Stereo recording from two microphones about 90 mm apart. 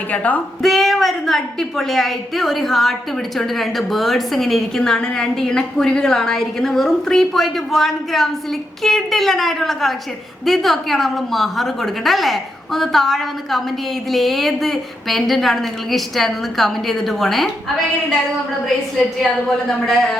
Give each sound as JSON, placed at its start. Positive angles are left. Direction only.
{"t": 0.1, "sound": "speech", "side_deg": 15}
{"t": 0.6, "sound": "a woman's voice", "side_deg": 0}
{"t": 19.2, "sound": "a woman's voice", "side_deg": 5}